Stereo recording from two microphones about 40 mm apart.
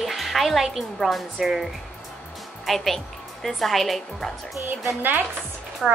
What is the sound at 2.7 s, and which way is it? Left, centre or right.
A woman's voice, centre.